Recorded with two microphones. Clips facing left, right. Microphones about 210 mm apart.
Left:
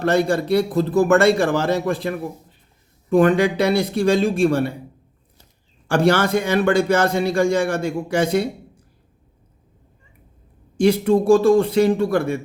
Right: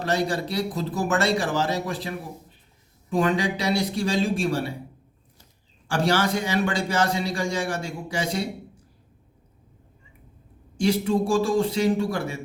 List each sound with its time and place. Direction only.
0.0 s a man's voice: 55° left (ahead or behind)
5.9 s a man's voice: 55° left (ahead or behind)
10.8 s a man's voice: 55° left (ahead or behind)